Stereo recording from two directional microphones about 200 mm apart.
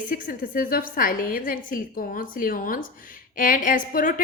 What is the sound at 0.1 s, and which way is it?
A woman's voice, 45° left (ahead or behind).